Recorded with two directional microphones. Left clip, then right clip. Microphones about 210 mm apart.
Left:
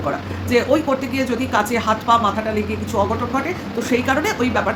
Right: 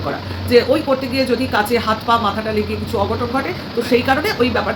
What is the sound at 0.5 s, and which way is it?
Speech, 5° left (ahead or behind).